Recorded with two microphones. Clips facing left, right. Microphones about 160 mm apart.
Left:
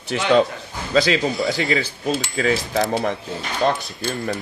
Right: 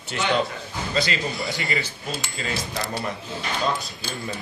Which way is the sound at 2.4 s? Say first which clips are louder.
Left 10 dB; 85° left.